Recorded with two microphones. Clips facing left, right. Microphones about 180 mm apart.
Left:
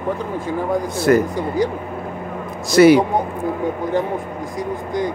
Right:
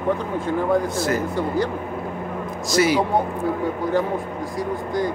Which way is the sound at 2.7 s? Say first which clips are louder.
Left 9 dB; 60° left (ahead or behind).